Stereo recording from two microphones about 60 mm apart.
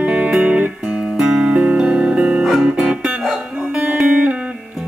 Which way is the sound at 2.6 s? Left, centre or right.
Centre.